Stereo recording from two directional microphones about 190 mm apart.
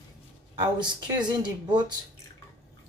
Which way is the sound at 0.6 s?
25° right (ahead or behind).